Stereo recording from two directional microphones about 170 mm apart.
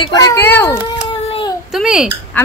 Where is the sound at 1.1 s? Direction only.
30° left (ahead or behind).